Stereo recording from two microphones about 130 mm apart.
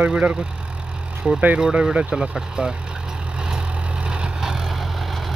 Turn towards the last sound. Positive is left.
turn(degrees=0)  # may be behind; listen again after turning